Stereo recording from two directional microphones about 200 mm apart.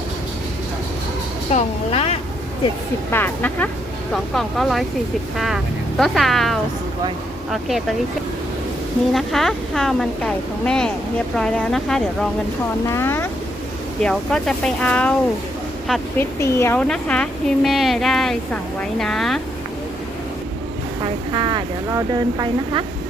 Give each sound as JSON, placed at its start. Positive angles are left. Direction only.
{"t": 1.5, "sound": "a woman's voice", "side_deg": 30}
{"t": 3.1, "sound": "a woman's voice", "side_deg": 10}
{"t": 6.0, "sound": "a woman's voice", "side_deg": 0}
{"t": 9.1, "sound": "a woman's voice", "side_deg": 0}
{"t": 21.3, "sound": "speech", "side_deg": -25}